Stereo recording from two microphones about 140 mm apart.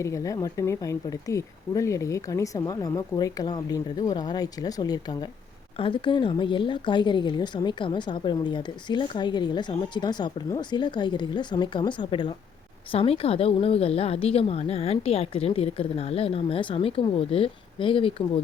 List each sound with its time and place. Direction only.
0.0 s speech: 25° left (ahead or behind)
5.7 s a woman's voice: 40° left (ahead or behind)